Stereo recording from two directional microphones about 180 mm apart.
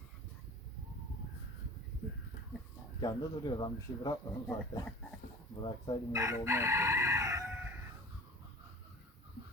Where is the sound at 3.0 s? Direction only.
20° left (ahead or behind).